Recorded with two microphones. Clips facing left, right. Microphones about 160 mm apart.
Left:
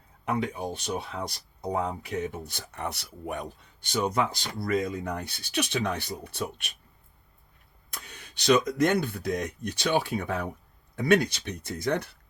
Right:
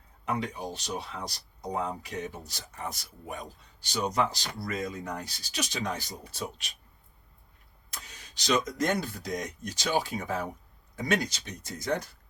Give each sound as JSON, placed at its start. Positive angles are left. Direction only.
{"t": 0.3, "sound": "speech", "side_deg": 55}
{"t": 7.9, "sound": "speech", "side_deg": 55}